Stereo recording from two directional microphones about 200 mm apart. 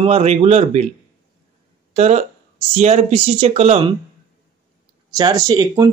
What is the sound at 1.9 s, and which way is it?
Speech, 35° right (ahead or behind).